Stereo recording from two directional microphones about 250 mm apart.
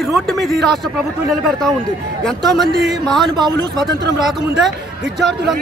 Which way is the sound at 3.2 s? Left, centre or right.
Centre.